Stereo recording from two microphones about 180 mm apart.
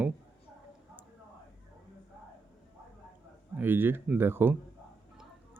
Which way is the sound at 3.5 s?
10° right (ahead or behind).